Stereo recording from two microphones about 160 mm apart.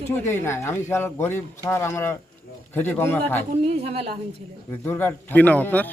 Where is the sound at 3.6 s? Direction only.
40° right (ahead or behind).